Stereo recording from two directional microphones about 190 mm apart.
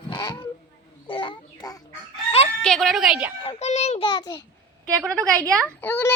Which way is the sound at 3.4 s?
35° left (ahead or behind).